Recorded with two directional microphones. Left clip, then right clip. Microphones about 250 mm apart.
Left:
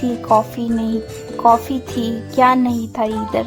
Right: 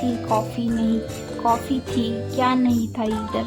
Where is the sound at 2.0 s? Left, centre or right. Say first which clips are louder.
Left 9 dB; left.